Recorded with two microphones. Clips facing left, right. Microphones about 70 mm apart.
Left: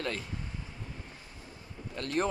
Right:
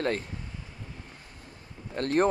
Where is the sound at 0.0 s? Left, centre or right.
Right.